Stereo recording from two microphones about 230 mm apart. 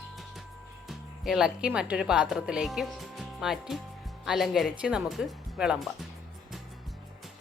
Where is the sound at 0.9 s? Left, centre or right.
Centre.